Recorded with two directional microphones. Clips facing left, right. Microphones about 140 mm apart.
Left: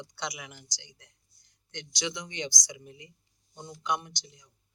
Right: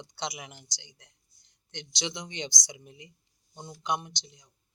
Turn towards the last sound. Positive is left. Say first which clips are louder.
# right 1 dB
turn(degrees=-25)  # may be behind; listen again after turning